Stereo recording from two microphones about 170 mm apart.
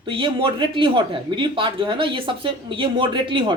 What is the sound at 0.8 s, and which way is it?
A woman's voice, 30° right (ahead or behind).